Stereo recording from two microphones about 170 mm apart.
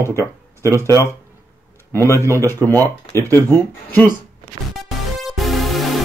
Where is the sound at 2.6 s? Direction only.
20° right (ahead or behind).